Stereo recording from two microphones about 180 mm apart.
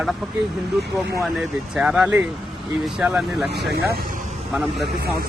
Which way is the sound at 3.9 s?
50° right (ahead or behind).